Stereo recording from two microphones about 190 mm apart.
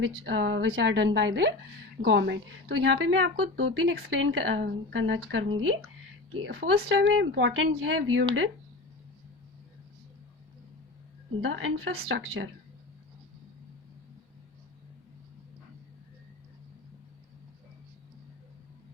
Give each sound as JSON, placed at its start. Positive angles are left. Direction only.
{"t": 0.3, "sound": "a woman's voice", "side_deg": -70}
{"t": 11.4, "sound": "a woman's voice", "side_deg": -75}